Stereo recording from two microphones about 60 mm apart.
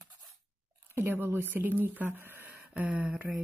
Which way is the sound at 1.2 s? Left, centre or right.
Right.